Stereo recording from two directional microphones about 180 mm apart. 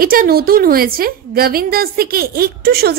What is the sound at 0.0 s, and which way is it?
A woman's voice, 55° right (ahead or behind).